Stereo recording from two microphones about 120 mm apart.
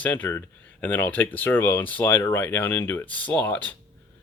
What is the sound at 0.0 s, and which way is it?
Speech, 15° left (ahead or behind).